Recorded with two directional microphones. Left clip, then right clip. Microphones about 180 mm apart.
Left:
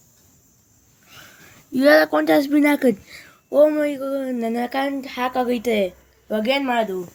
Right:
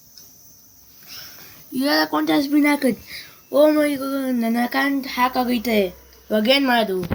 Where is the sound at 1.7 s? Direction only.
55° left (ahead or behind).